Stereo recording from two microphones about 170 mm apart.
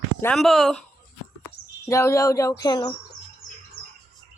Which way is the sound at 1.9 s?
15° left (ahead or behind).